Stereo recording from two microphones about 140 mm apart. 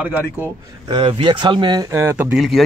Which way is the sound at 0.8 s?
40° right (ahead or behind).